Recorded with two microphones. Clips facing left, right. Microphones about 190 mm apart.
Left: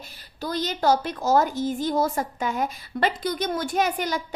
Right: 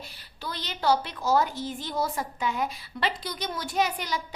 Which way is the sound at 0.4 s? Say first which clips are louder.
Left 4 dB; 45° left (ahead or behind).